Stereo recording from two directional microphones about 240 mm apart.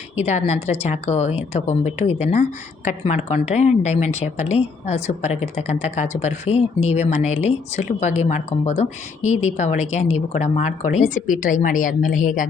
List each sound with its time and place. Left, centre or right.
0.2 s speech: left